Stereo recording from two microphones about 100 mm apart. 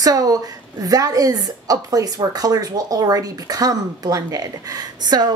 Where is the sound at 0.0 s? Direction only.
40° right (ahead or behind).